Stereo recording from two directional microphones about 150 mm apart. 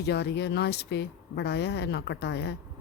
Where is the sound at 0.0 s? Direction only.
90° left.